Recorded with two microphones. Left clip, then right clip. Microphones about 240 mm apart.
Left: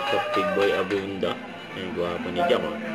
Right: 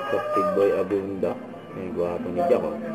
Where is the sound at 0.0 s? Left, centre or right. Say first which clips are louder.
Even; centre.